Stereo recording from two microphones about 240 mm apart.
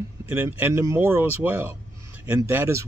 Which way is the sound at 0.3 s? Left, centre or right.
Centre.